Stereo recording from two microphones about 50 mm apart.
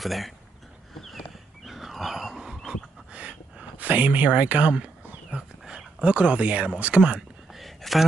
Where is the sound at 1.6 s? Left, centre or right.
Centre.